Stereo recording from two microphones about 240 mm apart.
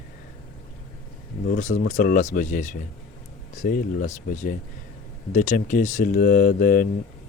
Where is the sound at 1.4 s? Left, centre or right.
Left.